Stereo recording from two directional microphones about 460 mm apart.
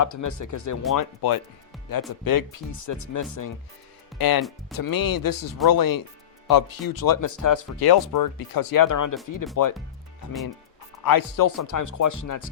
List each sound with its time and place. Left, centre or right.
0.0 s speech: left
0.9 s speech: left
4.2 s speech: left
11.0 s speech: left